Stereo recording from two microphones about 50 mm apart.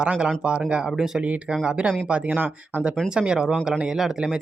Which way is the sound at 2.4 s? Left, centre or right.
Right.